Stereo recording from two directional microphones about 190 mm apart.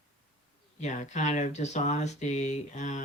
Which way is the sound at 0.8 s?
40° left (ahead or behind).